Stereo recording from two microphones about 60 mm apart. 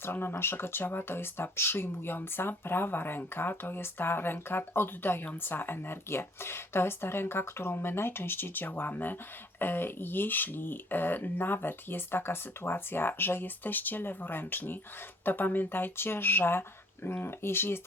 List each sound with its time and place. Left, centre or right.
0.0 s speech: left